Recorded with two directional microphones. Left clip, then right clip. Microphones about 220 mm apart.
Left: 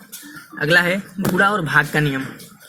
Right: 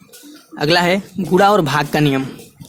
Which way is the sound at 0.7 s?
35° right (ahead or behind).